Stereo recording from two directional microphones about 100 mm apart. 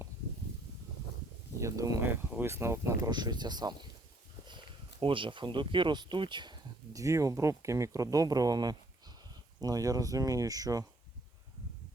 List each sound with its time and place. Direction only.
1.5 s a sound: 35° right (ahead or behind)
2.0 s speech: 20° right (ahead or behind)
3.1 s speech: 45° right (ahead or behind)
4.4 s speech: 55° right (ahead or behind)
6.9 s speech: 35° right (ahead or behind)